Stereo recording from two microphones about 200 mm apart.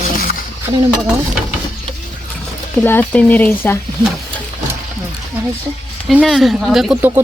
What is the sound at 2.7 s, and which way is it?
Speech, 10° left (ahead or behind).